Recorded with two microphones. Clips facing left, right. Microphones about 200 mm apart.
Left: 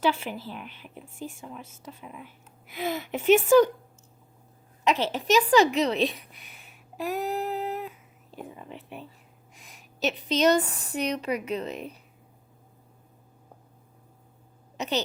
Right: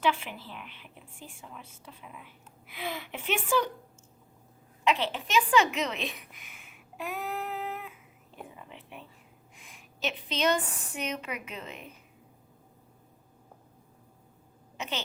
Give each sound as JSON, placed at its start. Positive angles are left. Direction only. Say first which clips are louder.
{"t": 0.0, "sound": "a woman's voice", "louder": "left 3 dB", "side_deg": 40}
{"t": 4.8, "sound": "a woman's voice", "louder": "left 3 dB", "side_deg": 40}
{"t": 14.8, "sound": "speech", "louder": "left 8 dB", "side_deg": 40}